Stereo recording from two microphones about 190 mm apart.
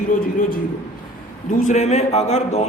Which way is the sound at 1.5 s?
40° left (ahead or behind).